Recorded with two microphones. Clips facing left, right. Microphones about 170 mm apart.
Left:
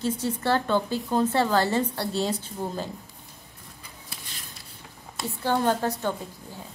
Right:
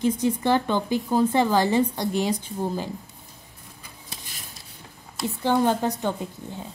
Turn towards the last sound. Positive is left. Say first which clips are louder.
# right 1 dB
turn(degrees=-15)  # may be behind; listen again after turning